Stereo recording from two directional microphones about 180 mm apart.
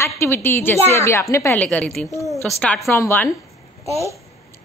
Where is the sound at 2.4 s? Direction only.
Centre (ahead or behind).